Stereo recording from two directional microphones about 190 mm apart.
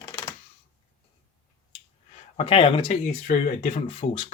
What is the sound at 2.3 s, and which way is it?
Speech, 30° left (ahead or behind).